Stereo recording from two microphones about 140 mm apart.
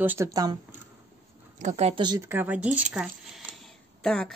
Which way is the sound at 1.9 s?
30° right (ahead or behind).